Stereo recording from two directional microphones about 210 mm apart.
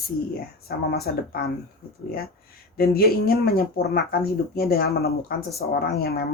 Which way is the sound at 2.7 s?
45° left (ahead or behind).